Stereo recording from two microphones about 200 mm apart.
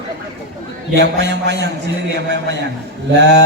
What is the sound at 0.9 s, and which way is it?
Mantra, 60° right (ahead or behind).